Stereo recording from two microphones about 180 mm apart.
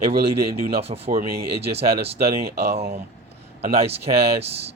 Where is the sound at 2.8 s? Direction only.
60° right (ahead or behind).